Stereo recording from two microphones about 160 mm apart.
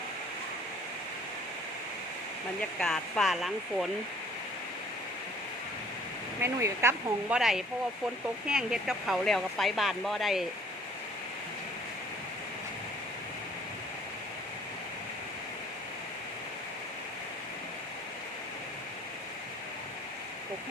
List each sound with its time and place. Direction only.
2.6 s speech: 5° left (ahead or behind)
6.4 s speech: 15° right (ahead or behind)
7.3 s speech: 5° right (ahead or behind)